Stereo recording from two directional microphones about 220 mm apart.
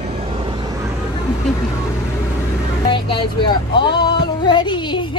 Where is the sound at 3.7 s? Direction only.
20° left (ahead or behind).